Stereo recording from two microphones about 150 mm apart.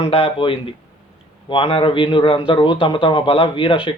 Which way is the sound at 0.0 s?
40° left (ahead or behind).